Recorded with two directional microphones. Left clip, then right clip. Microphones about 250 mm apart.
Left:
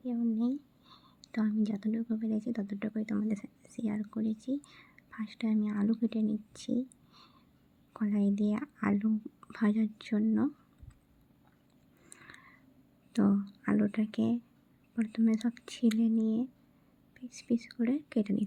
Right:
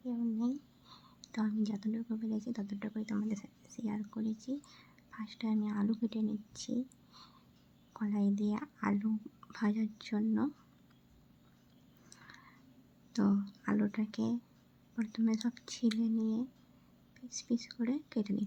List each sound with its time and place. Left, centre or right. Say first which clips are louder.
0.0 s speech: left 4 dB; centre
12.1 s a sound: left 3 dB; centre
13.1 s speech: left 3 dB; centre